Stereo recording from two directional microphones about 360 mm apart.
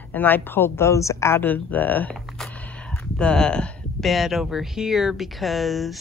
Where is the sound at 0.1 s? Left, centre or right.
Centre.